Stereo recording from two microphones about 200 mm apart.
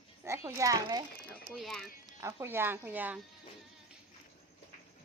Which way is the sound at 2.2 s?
10° right (ahead or behind).